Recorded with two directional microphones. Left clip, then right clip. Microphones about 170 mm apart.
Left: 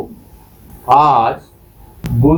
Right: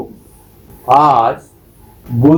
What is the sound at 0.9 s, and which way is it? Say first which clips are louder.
Mantra: right 1 dB; 45° right (ahead or behind).